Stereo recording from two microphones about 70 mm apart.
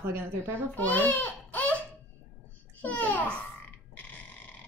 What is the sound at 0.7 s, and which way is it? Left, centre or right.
Speech, left.